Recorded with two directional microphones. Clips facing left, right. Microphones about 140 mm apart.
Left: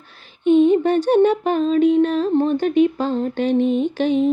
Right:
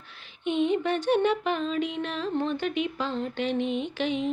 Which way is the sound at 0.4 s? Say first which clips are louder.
Left 11 dB; 40° left (ahead or behind).